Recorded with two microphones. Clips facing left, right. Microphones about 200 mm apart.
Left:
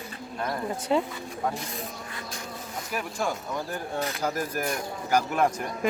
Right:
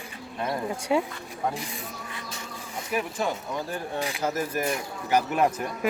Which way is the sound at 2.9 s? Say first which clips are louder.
Right 2 dB; 5° right (ahead or behind).